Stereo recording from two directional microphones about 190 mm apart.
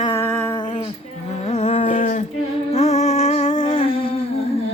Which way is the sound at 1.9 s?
40° left (ahead or behind).